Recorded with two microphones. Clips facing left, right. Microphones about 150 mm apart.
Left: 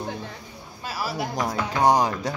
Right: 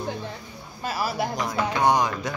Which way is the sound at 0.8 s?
50° right (ahead or behind).